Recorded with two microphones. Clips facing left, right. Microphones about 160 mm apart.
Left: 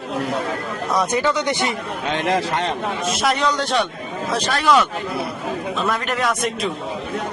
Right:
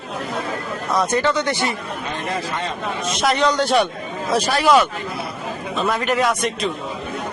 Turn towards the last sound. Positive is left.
turn(degrees=0)  # may be behind; listen again after turning